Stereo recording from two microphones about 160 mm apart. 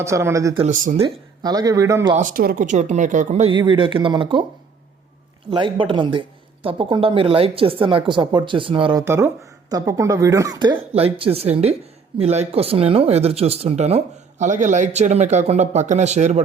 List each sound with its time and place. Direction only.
0.0 s speech: 15° right (ahead or behind)
2.1 s speech: 60° right (ahead or behind)
3.5 s speech: 30° right (ahead or behind)
5.5 s speech: 30° right (ahead or behind)
9.0 s speech: 15° right (ahead or behind); by 16.4 s 45° right (ahead or behind)